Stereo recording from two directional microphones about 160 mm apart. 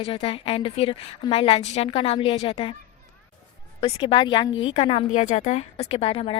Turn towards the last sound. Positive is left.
turn(degrees=35)  # may be behind; listen again after turning